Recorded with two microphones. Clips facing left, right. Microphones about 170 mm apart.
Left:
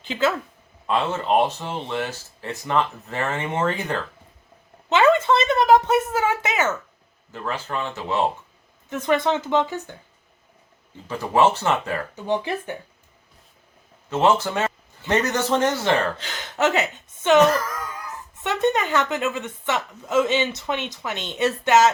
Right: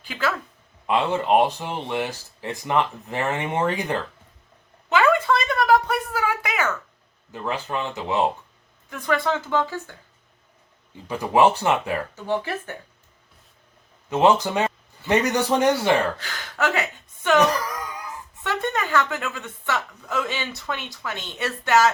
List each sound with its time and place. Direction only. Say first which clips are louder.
0.0 s speech: left 4 dB; 25° left (ahead or behind)
0.9 s speech: right 2 dB; 15° right (ahead or behind)
4.9 s a sound: left 2 dB; 25° left (ahead or behind)
7.3 s speech: right 1 dB; 15° right (ahead or behind)
8.9 s speech: left 3 dB; 20° left (ahead or behind)
11.1 s speech: right 1 dB; 15° right (ahead or behind)
12.1 s speech: left 2 dB; 15° left (ahead or behind)
14.1 s speech: right 1 dB; 15° right (ahead or behind)
16.1 s speech: left 3 dB; 20° left (ahead or behind)
17.5 s wail: left 2 dB; 15° right (ahead or behind)
18.4 s speech: left 4 dB; 20° left (ahead or behind)